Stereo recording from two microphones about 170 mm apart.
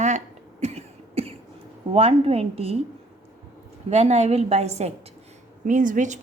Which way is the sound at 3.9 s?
40° right (ahead or behind).